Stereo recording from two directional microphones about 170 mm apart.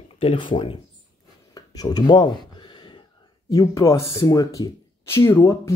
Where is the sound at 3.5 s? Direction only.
20° left (ahead or behind).